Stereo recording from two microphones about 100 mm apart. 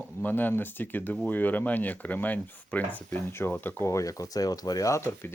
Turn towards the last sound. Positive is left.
turn(degrees=25)  # may be behind; listen again after turning